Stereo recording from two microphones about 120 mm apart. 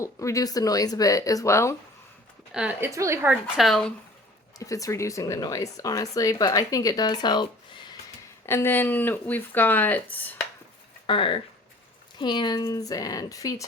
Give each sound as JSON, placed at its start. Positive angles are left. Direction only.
{"t": 0.0, "sound": "speech", "side_deg": 25}
{"t": 2.5, "sound": "speech", "side_deg": -5}
{"t": 2.8, "sound": "a woman's voice", "side_deg": -25}
{"t": 3.6, "sound": "speech", "side_deg": 0}
{"t": 4.6, "sound": "speech", "side_deg": 30}
{"t": 8.4, "sound": "speech", "side_deg": 20}
{"t": 11.0, "sound": "speech", "side_deg": 45}